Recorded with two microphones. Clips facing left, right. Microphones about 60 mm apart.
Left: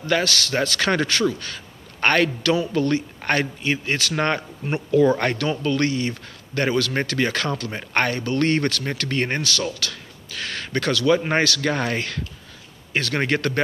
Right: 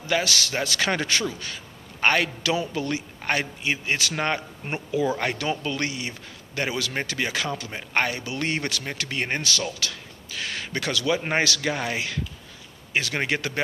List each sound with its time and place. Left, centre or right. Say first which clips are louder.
0.1 s speech: left 3 dB; centre
2.0 s speech: left 3 dB; centre
4.1 s speech: left 4 dB; centre
9.4 s speech: left 3 dB; right